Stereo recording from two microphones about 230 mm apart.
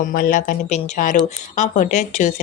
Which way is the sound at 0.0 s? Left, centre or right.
Left.